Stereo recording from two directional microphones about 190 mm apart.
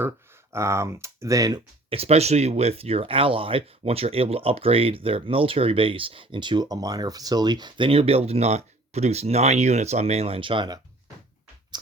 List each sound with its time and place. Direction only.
0.5 s speech: 15° right (ahead or behind)